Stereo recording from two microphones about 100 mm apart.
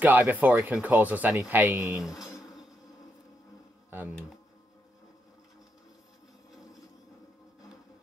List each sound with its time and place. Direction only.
0.0 s speech: 15° right (ahead or behind)